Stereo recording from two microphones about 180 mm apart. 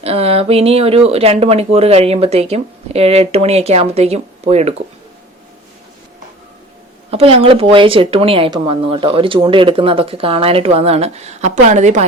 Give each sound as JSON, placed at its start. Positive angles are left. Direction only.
{"t": 0.0, "sound": "speech", "side_deg": -35}
{"t": 7.1, "sound": "speech", "side_deg": -30}